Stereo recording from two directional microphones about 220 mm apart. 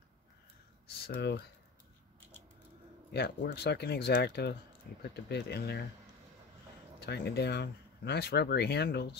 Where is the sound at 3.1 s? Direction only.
50° left (ahead or behind).